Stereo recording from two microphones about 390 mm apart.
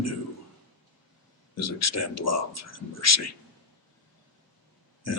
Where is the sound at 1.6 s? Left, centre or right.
Left.